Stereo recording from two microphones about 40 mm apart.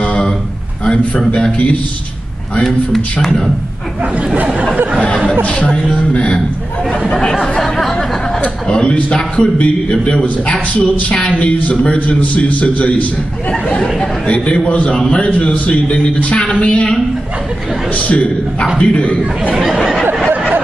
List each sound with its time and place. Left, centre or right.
0.8 s a man's voice: left
2.6 s a man's voice: centre
5.4 s a man's voice: left
8.6 s a man's voice: left
12.2 s a man's voice: left
17.9 s a man's voice: left